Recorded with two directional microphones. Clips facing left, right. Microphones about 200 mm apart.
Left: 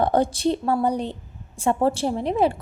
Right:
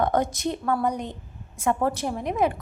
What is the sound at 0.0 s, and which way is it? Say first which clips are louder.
A woman's voice: left 4 dB; 30° left (ahead or behind).